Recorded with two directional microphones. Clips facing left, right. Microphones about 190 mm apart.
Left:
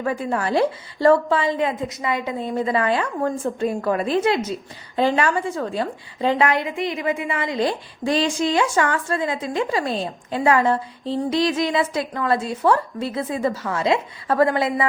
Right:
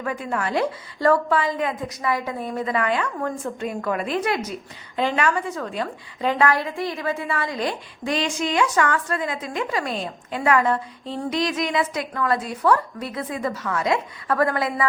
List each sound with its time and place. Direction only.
0.0 s a woman's voice: 30° left (ahead or behind)